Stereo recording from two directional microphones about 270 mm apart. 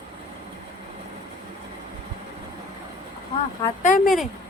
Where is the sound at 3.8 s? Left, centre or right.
Left.